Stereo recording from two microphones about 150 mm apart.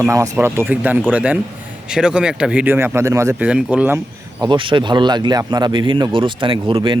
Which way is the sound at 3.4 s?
10° right (ahead or behind).